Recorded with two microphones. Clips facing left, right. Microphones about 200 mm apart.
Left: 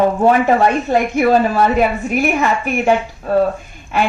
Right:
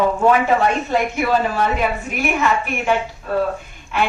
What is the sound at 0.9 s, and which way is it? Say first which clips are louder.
A woman's voice: left 5 dB; 45° left (ahead or behind).